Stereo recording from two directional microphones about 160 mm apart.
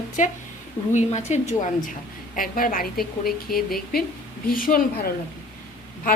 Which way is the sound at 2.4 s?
60° left (ahead or behind).